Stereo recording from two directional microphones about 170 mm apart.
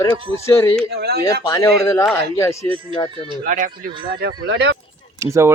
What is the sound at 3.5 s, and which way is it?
Speech, 50° right (ahead or behind).